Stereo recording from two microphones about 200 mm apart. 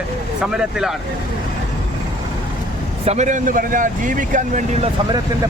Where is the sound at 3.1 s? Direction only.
35° right (ahead or behind).